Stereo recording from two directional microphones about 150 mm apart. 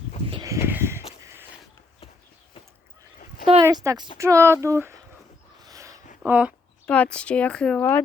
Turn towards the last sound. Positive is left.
turn(degrees=10)  # may be behind; listen again after turning